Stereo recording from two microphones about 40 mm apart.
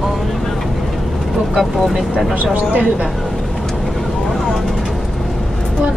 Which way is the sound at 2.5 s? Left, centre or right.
Right.